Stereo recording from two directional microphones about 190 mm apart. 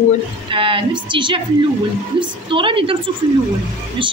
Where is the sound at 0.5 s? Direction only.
25° right (ahead or behind).